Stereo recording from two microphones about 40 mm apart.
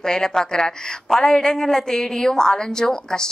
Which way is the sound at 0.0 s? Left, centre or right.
Centre.